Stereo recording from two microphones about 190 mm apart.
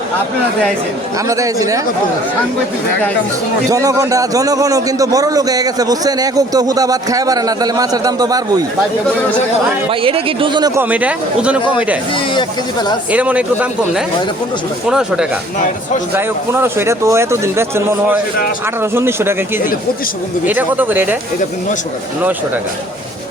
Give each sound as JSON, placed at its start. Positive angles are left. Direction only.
{"t": 1.3, "sound": "speech", "side_deg": -15}
{"t": 3.7, "sound": "a man's voice", "side_deg": -15}
{"t": 9.9, "sound": "a man's voice", "side_deg": -30}
{"t": 10.8, "sound": "speech", "side_deg": -10}
{"t": 13.1, "sound": "speech", "side_deg": -5}
{"t": 20.4, "sound": "speech", "side_deg": -10}